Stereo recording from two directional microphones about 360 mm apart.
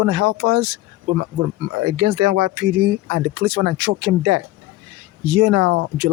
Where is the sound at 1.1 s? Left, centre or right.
Right.